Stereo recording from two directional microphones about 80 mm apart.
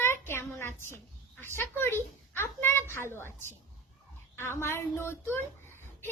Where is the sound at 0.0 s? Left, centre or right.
Left.